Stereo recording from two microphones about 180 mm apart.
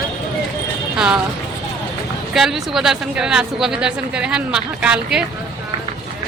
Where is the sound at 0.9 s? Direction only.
5° right (ahead or behind).